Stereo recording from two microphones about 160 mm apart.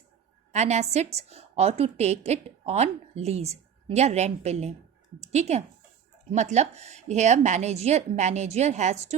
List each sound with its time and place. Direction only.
0.5 s a woman's voice: 45° right (ahead or behind)